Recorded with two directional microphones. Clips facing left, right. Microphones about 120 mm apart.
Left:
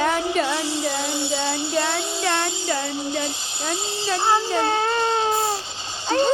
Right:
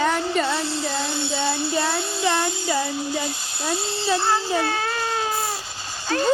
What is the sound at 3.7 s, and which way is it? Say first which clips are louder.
Speech: right 1 dB; 20° left (ahead or behind).